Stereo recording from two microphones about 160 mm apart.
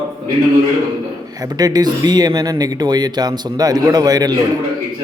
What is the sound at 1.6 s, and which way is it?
Speech, 25° right (ahead or behind).